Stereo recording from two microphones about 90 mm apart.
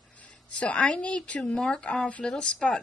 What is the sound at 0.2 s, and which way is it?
A woman's voice, 15° left (ahead or behind).